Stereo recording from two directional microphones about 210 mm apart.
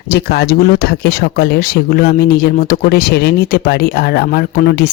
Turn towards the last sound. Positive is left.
turn(degrees=45)  # may be behind; listen again after turning